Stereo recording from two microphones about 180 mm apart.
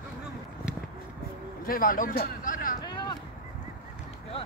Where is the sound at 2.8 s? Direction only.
25° left (ahead or behind).